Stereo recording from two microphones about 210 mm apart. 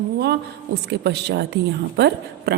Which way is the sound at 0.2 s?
50° right (ahead or behind).